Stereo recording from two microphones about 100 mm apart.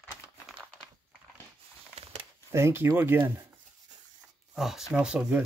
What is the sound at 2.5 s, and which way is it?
Speech, 25° right (ahead or behind).